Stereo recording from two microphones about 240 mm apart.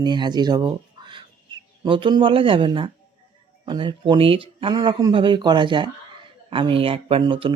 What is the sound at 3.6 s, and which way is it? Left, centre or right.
Speech, centre.